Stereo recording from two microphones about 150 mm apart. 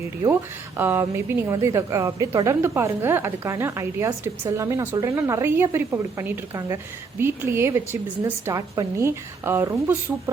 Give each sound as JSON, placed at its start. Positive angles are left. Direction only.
{"t": 0.8, "sound": "a woman's voice", "side_deg": -15}